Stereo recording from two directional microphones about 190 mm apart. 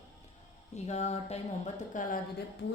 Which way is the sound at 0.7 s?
35° left (ahead or behind).